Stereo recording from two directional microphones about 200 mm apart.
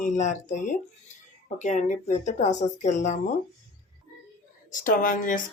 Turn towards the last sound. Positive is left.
turn(degrees=40)  # may be behind; listen again after turning